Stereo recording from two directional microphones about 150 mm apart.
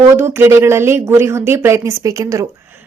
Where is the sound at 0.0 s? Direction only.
15° right (ahead or behind).